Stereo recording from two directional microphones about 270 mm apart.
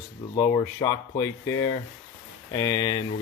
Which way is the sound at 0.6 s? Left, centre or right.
Centre.